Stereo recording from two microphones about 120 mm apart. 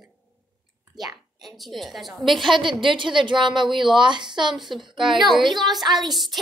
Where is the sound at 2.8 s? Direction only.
40° right (ahead or behind).